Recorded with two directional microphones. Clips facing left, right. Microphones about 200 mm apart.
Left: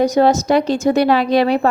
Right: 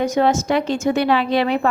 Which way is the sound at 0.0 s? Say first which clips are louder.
Left 4 dB; 35° left (ahead or behind).